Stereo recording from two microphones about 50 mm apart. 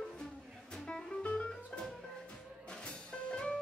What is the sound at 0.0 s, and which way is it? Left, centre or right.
Music, centre.